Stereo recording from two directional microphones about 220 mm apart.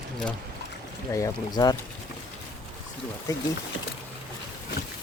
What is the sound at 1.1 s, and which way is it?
Speech, 15° left (ahead or behind).